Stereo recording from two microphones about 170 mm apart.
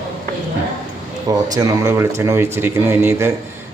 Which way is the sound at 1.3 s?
20° right (ahead or behind).